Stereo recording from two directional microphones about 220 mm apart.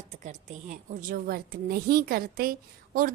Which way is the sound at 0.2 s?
35° right (ahead or behind).